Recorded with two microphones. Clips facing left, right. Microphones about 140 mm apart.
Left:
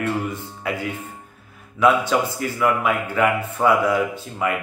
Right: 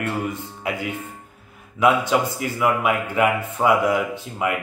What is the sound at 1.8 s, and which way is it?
A man's voice, 20° right (ahead or behind).